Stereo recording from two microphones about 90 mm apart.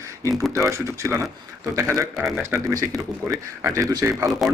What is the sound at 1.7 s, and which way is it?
Speech, 30° right (ahead or behind).